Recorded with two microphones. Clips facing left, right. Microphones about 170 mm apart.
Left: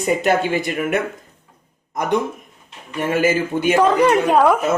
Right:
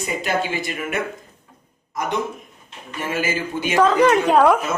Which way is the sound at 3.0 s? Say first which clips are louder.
Left 6 dB; 55° left (ahead or behind).